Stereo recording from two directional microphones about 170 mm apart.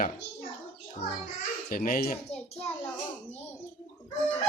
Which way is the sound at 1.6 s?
55° left (ahead or behind).